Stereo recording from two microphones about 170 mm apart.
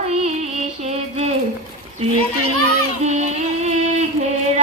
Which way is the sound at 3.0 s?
40° right (ahead or behind).